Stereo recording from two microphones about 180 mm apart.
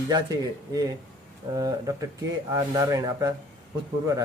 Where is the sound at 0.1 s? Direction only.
20° right (ahead or behind).